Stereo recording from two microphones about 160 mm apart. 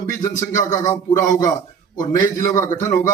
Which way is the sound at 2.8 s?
20° left (ahead or behind).